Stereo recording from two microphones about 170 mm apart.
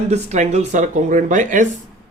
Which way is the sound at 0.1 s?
40° right (ahead or behind).